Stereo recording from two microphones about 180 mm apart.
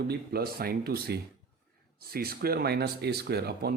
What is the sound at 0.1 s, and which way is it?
Speech, 60° right (ahead or behind).